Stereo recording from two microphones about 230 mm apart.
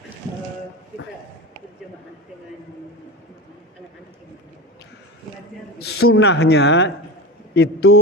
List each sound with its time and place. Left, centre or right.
6.1 s speech: left